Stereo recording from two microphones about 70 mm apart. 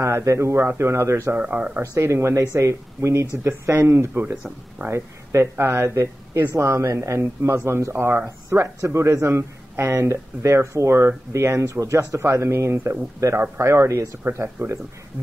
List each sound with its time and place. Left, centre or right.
0.0 s speech: right
1.3 s speech: right
1.8 s speech: right